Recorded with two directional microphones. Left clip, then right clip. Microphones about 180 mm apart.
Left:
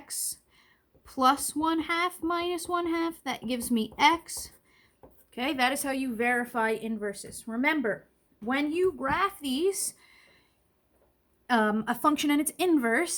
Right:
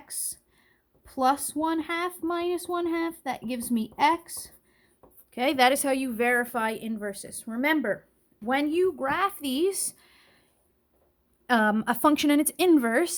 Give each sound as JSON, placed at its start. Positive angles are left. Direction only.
{"t": 0.1, "sound": "a woman's voice", "side_deg": -30}
{"t": 5.3, "sound": "a woman's voice", "side_deg": -45}
{"t": 11.4, "sound": "a woman's voice", "side_deg": -55}